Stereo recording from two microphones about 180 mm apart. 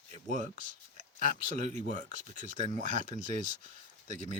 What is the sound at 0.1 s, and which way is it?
Speech, 45° right (ahead or behind).